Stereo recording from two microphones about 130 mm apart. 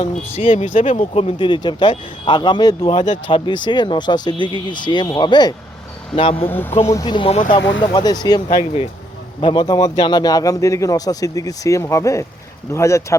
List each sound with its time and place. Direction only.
0.0 s speech: 45° left (ahead or behind)
0.6 s speech: 70° left (ahead or behind); by 5.5 s 35° left (ahead or behind)
6.1 s speech: 45° left (ahead or behind)
6.5 s speech: 15° left (ahead or behind)
7.1 s speech: 40° left (ahead or behind)
9.4 s speech: 35° left (ahead or behind)